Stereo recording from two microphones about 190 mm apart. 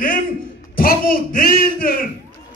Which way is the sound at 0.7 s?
50° left (ahead or behind).